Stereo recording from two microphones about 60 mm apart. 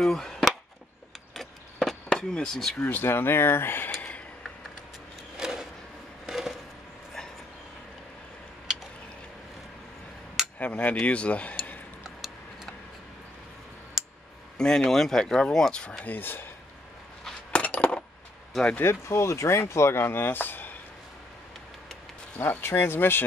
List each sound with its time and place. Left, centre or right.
0.0 s chop: centre
1.3 s vehicle: centre
2.1 s speech: centre
2.9 s speech: left
5.4 s a sound: centre
10.6 s speech: left
14.6 s speech: centre
16.1 s speech: left
17.5 s a sound: centre
18.8 s speech: left
22.4 s speech: left